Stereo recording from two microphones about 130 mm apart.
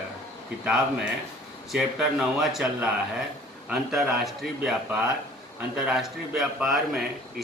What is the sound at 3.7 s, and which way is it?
Speech, 5° right (ahead or behind).